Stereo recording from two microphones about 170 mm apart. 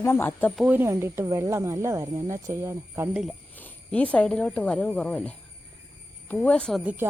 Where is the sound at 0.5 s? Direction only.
10° right (ahead or behind).